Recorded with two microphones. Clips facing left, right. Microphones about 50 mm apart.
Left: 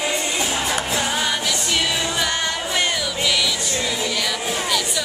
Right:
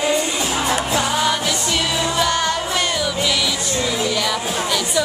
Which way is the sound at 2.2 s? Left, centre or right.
Centre.